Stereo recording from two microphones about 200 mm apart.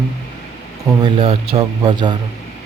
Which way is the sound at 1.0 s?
25° right (ahead or behind).